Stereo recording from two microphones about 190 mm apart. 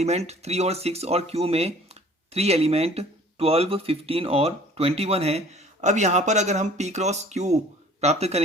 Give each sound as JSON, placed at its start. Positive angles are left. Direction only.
{"t": 0.0, "sound": "speech", "side_deg": -35}